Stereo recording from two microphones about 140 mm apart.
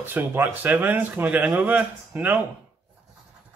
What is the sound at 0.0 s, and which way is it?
Speech, 15° right (ahead or behind).